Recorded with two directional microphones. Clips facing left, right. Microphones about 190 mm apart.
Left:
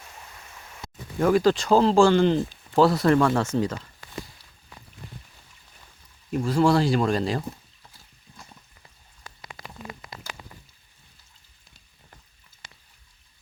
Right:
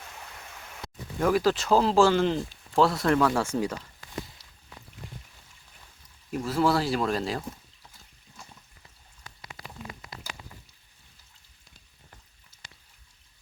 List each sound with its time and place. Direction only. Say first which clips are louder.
1.2 s speech: left 4 dB; 5° right (ahead or behind)
4.4 s a sound: left 1 dB; 85° right
6.3 s speech: left 4 dB; 5° right (ahead or behind)